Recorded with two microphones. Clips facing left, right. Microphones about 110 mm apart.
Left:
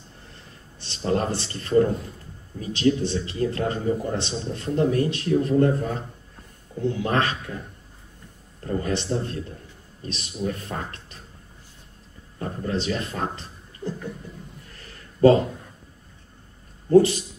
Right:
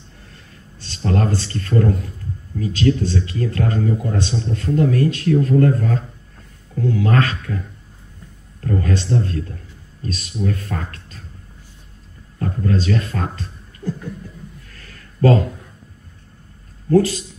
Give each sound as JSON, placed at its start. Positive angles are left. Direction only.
{"t": 0.7, "sound": "speech", "side_deg": 20}
{"t": 8.6, "sound": "speech", "side_deg": 20}
{"t": 12.4, "sound": "speech", "side_deg": 20}
{"t": 14.7, "sound": "a sound", "side_deg": 25}